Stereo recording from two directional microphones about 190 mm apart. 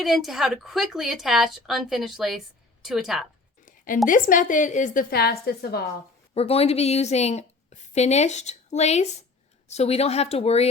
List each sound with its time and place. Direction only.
0.0 s a woman's voice: centre (ahead or behind)
3.7 s a woman's voice: 45° left (ahead or behind)
6.3 s a woman's voice: 30° left (ahead or behind)